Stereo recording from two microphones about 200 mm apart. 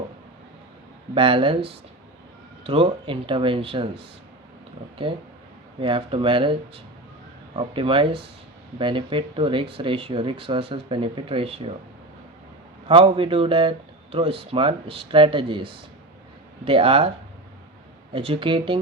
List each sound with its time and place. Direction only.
1.1 s speech: 25° right (ahead or behind)
5.8 s speech: 25° right (ahead or behind)
12.9 s speech: 25° right (ahead or behind)
18.1 s speech: 25° right (ahead or behind)